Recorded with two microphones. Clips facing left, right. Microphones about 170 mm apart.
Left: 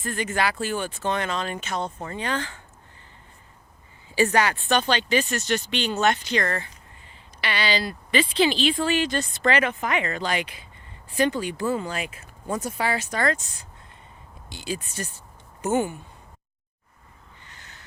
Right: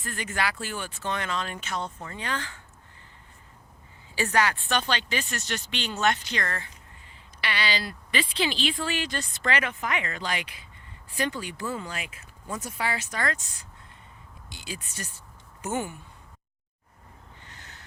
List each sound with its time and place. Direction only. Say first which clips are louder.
0.0 s speech: left 5 dB; 25° left (ahead or behind)
4.1 s speech: left 4 dB; 20° left (ahead or behind)